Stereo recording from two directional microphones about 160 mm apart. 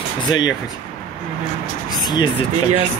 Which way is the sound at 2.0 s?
25° left (ahead or behind).